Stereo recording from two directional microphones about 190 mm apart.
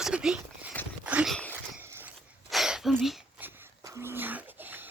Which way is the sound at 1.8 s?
10° right (ahead or behind).